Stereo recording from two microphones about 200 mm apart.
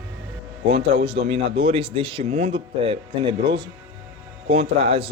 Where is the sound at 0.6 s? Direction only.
30° right (ahead or behind).